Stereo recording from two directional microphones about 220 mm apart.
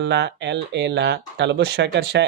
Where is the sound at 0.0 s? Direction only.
55° right (ahead or behind).